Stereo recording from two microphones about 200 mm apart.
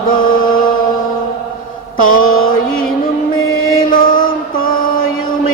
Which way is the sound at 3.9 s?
45° left (ahead or behind).